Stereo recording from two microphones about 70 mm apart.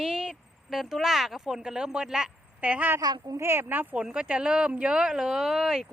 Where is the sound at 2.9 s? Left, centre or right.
Right.